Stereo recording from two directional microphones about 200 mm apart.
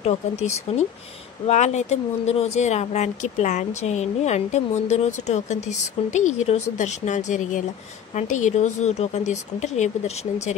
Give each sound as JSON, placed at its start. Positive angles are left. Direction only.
{"t": 0.0, "sound": "speech", "side_deg": 35}